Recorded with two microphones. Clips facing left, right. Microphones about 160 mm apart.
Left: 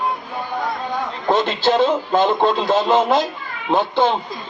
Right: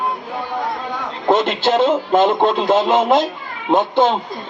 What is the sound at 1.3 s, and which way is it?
A man's voice, 25° right (ahead or behind).